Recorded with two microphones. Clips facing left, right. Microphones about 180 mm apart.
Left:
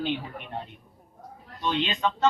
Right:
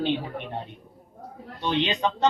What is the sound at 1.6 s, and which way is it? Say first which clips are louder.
Speech: right 2 dB; 25° right (ahead or behind).